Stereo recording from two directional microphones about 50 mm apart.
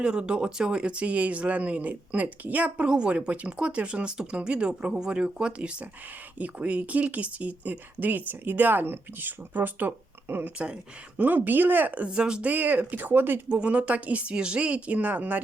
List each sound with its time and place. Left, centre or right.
0.0 s speech: centre; by 9.9 s right
10.4 s speech: right
11.2 s speech: right; by 12.5 s centre
12.5 s speech: right
13.5 s speech: right